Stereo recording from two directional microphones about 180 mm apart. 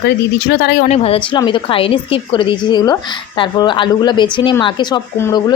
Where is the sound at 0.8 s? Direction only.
35° left (ahead or behind).